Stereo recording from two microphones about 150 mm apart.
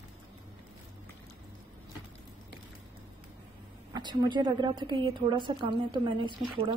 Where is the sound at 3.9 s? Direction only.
25° right (ahead or behind).